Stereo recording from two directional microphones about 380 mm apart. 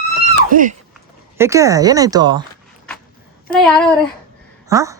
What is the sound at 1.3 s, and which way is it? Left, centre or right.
Speech, centre.